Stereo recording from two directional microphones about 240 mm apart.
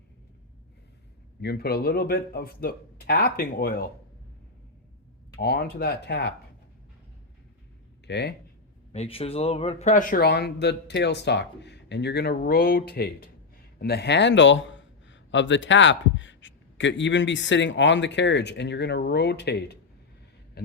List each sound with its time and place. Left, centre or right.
1.4 s speech: left
5.4 s speech: left
8.0 s speech: left
8.9 s a man's voice: left